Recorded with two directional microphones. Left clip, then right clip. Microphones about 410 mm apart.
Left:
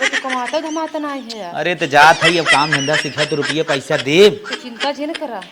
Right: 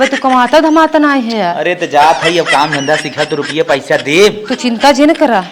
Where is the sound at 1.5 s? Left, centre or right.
Left.